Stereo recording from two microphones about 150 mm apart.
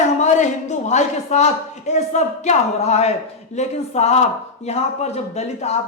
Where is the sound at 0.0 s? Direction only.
50° left (ahead or behind).